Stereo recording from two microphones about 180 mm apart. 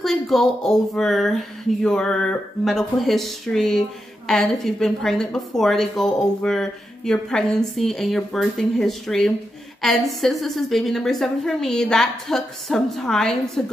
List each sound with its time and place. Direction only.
0.0 s a woman's voice: centre (ahead or behind)